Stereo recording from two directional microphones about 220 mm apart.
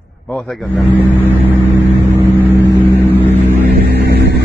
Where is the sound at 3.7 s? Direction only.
50° right (ahead or behind).